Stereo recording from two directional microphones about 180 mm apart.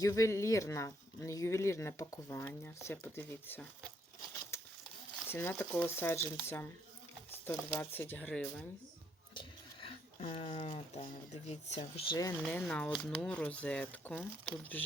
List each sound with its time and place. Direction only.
0.0 s speech: 20° left (ahead or behind)
4.5 s a sound: 15° left (ahead or behind)
5.3 s speech: 10° left (ahead or behind)
9.3 s speech: 30° left (ahead or behind)
11.8 s speech: 25° left (ahead or behind)
12.5 s speech: 5° left (ahead or behind)